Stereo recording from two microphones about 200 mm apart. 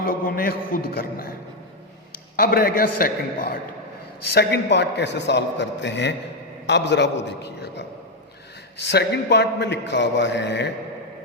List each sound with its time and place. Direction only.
0.0 s a man's voice: 45° left (ahead or behind)
2.3 s a man's voice: 50° left (ahead or behind)